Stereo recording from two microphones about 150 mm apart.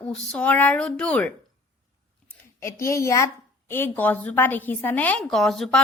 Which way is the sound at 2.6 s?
20° left (ahead or behind).